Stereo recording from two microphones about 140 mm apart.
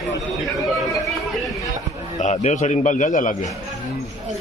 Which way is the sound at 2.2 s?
60° left (ahead or behind).